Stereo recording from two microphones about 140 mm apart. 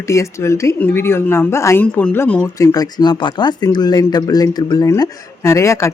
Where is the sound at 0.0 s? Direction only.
20° left (ahead or behind).